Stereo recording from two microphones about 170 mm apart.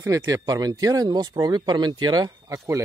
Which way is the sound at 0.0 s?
20° right (ahead or behind).